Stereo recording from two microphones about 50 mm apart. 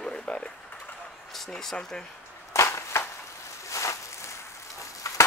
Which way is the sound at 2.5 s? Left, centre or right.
Left.